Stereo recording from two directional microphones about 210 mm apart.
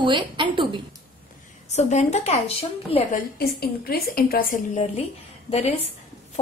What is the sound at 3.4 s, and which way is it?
A woman's voice, 45° left (ahead or behind).